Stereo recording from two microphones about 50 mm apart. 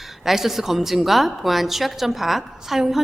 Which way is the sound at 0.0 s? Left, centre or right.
Centre.